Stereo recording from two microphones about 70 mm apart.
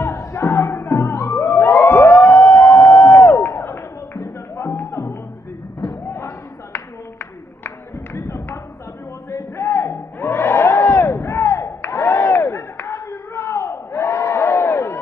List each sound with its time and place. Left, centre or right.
0.0 s music: left
5.8 s a sound: left
9.3 s crowd: left